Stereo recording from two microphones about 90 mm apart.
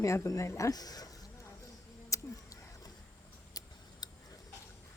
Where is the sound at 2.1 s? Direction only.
35° left (ahead or behind).